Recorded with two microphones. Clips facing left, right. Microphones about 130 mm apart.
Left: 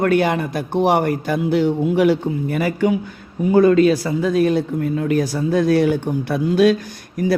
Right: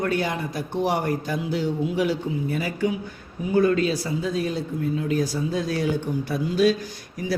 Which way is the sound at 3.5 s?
90° left.